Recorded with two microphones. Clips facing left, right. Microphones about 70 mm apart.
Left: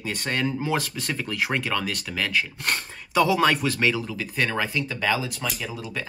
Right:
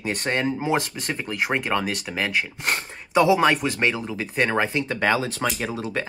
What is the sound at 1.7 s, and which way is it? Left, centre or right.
Speech, right.